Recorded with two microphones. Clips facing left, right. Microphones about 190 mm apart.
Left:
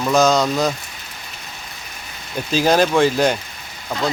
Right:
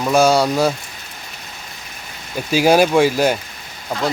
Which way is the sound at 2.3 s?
10° right (ahead or behind).